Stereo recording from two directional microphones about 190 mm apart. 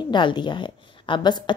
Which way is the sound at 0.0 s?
25° left (ahead or behind).